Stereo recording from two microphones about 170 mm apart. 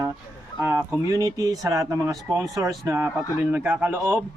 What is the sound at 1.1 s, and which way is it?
Speech, 20° right (ahead or behind).